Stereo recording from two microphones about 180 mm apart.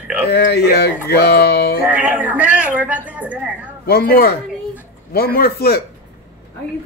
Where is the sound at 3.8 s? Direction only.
60° left (ahead or behind).